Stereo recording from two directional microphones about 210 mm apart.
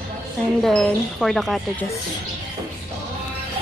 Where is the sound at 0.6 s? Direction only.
5° left (ahead or behind).